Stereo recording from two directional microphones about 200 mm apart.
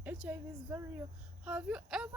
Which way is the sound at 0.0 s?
10° right (ahead or behind).